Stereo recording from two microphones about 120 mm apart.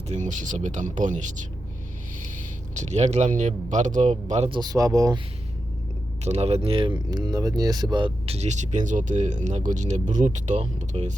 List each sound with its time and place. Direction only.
0.1 s speech: 90° right
2.7 s speech: 70° right (ahead or behind)
4.4 s speech: 45° right (ahead or behind)
4.7 s speech: 25° right (ahead or behind)
6.2 s speech: 60° right (ahead or behind); by 8.4 s 45° right (ahead or behind)
8.4 s speech: 75° right (ahead or behind)